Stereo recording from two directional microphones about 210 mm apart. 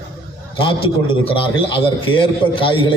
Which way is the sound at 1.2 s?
25° left (ahead or behind).